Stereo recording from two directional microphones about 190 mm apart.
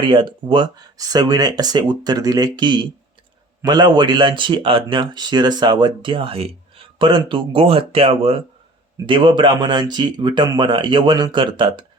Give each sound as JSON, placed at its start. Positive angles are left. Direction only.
{"t": 0.0, "sound": "speech", "side_deg": -25}